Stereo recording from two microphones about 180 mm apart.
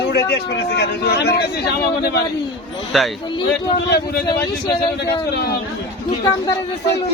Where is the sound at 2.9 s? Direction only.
Centre (ahead or behind).